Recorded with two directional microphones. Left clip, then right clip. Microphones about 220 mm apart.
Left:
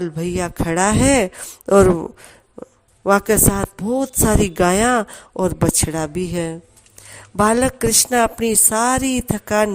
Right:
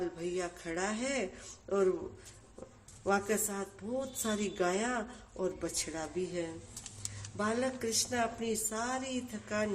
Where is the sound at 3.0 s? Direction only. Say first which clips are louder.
Left 17 dB; 45° left (ahead or behind).